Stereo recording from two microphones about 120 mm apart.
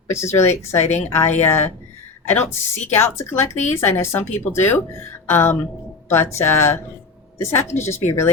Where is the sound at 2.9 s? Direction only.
20° left (ahead or behind).